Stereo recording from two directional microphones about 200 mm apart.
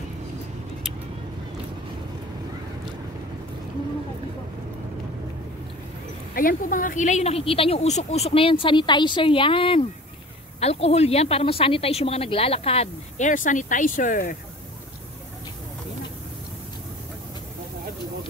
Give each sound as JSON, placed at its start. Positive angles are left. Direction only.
{"t": 6.3, "sound": "a woman's voice", "side_deg": 45}